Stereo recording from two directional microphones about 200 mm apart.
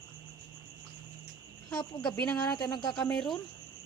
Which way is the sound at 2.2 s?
5° left (ahead or behind).